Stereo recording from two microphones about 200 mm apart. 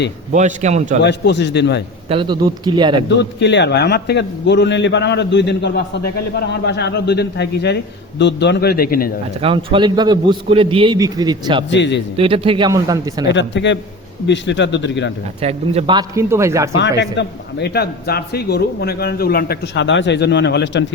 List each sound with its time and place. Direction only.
0.3 s a man's voice: 35° right (ahead or behind)
1.0 s a man's voice: 60° left (ahead or behind)
2.0 s a man's voice: 25° right (ahead or behind)
3.2 s a man's voice: 60° left (ahead or behind)
9.4 s a man's voice: 25° right (ahead or behind)
11.7 s a man's voice: 60° left (ahead or behind)
12.1 s a man's voice: 30° right (ahead or behind)
13.3 s a man's voice: 65° left (ahead or behind)
15.4 s a man's voice: 30° right (ahead or behind); by 16.6 s 15° right (ahead or behind)
16.7 s a man's voice: 60° left (ahead or behind)